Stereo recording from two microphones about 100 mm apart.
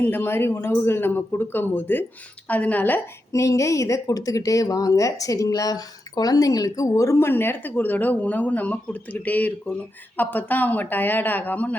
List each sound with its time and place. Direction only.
0.0 s a man's voice: 20° left (ahead or behind)
3.3 s speech: 30° left (ahead or behind); by 11.8 s 15° left (ahead or behind)